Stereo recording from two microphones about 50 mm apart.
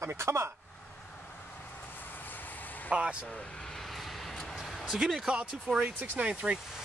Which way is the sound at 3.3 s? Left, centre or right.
Centre.